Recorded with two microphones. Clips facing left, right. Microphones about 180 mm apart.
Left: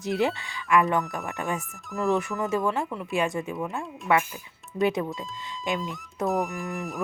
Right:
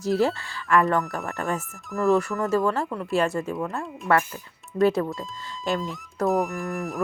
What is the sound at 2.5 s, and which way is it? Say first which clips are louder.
Speech: right 3 dB; 15° left (ahead or behind).